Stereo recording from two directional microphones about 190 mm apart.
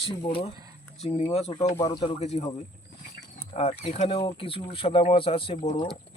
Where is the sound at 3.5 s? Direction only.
35° left (ahead or behind).